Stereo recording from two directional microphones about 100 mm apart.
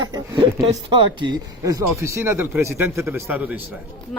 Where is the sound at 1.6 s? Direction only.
30° right (ahead or behind).